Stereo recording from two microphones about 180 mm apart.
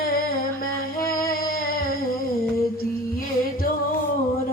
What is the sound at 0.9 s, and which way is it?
Music, 55° left (ahead or behind).